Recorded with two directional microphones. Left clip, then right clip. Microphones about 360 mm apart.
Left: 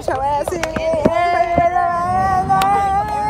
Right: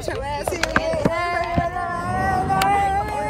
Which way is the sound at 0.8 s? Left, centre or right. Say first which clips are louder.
Left 6 dB; left.